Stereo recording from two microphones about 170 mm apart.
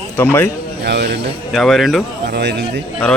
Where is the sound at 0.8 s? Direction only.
75° right (ahead or behind).